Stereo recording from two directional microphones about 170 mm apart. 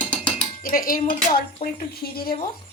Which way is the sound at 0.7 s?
55° left (ahead or behind).